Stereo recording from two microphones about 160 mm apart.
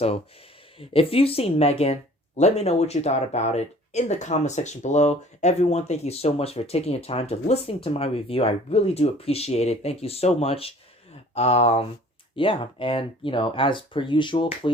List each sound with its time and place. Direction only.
0.8 s speech: 35° left (ahead or behind)